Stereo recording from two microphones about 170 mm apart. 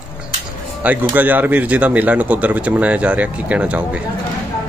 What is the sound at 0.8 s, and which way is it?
Speech, 10° right (ahead or behind).